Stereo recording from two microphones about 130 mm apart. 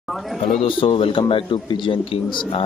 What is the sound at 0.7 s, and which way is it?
Speech, 45° left (ahead or behind).